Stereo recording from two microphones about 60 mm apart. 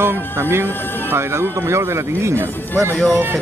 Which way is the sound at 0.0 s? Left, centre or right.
Right.